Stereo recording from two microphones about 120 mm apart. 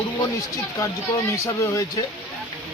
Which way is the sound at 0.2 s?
25° left (ahead or behind).